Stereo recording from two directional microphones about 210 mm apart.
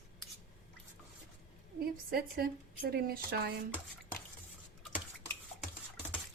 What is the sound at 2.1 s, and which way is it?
Speech, 45° right (ahead or behind).